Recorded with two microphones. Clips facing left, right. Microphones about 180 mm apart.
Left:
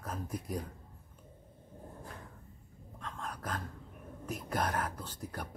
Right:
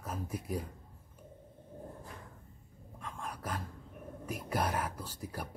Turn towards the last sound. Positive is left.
turn(degrees=-10)  # may be behind; listen again after turning